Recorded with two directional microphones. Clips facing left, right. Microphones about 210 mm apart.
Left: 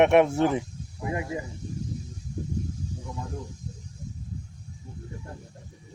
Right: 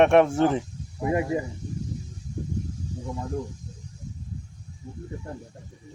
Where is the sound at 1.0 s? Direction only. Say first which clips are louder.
Right 6 dB; 35° right (ahead or behind).